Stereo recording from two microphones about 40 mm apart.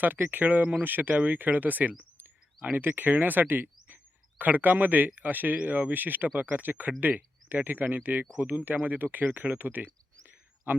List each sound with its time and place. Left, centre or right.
0.0 s a man's voice: right